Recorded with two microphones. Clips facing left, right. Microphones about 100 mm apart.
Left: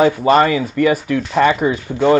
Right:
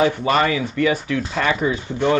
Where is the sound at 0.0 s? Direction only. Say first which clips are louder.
Left 5 dB; 35° left (ahead or behind).